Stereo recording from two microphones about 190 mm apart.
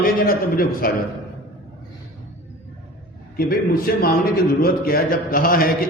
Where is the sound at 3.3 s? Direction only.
50° left (ahead or behind).